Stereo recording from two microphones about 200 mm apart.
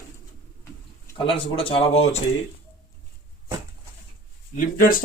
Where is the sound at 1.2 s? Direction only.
25° left (ahead or behind).